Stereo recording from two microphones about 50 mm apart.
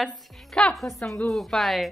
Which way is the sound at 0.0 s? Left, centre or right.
Centre.